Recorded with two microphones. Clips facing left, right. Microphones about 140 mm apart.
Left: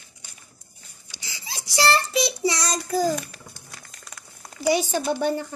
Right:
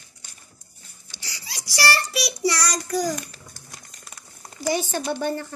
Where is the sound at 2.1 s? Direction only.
20° left (ahead or behind).